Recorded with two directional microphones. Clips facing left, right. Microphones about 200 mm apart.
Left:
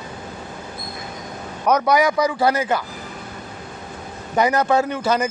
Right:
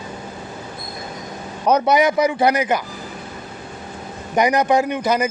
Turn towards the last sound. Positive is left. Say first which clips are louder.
# right 1 dB
turn(degrees=-15)  # may be behind; listen again after turning